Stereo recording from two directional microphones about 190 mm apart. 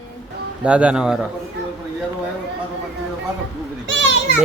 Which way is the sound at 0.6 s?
5° right (ahead or behind).